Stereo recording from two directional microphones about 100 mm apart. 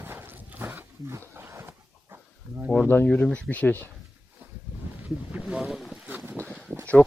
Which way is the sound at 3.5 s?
15° left (ahead or behind).